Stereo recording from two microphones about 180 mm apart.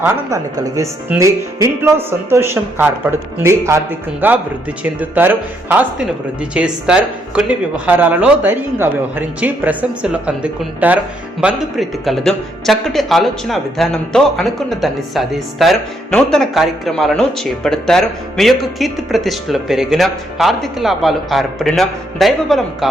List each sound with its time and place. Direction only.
0.0 s speech: 20° right (ahead or behind); by 22.9 s centre (ahead or behind)